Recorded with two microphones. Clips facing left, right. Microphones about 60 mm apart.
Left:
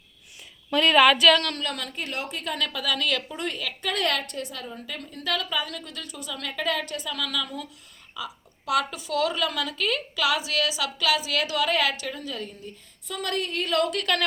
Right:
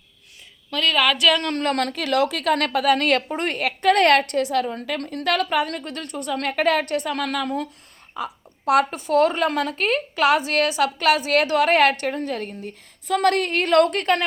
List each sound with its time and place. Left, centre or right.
0.7 s a woman's voice: centre
1.5 s a woman's voice: right